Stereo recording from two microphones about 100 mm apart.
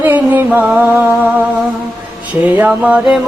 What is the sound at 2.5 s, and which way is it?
Music, 15° right (ahead or behind).